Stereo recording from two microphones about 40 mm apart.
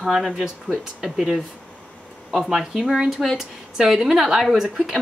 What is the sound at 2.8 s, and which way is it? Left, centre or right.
A woman's voice, centre.